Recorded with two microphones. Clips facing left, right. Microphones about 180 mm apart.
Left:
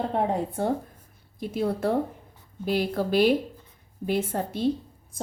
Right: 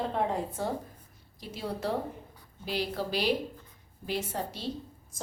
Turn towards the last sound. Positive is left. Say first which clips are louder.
# left 7 dB
turn(degrees=50)  # may be behind; listen again after turning